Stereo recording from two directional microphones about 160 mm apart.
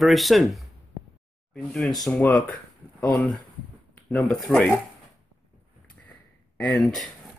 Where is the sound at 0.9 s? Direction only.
25° right (ahead or behind).